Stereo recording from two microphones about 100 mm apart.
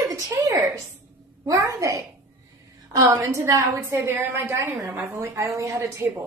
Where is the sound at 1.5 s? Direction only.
35° right (ahead or behind).